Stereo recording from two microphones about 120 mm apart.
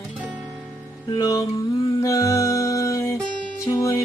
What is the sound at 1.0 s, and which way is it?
Music, 25° left (ahead or behind).